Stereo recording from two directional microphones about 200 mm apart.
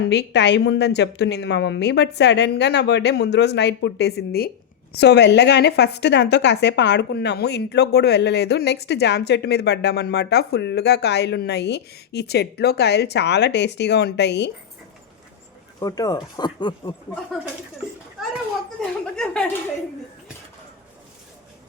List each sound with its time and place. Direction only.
0.1 s a woman's voice: 60° left (ahead or behind)
15.8 s speech: 20° left (ahead or behind)
19.1 s speech: 5° left (ahead or behind)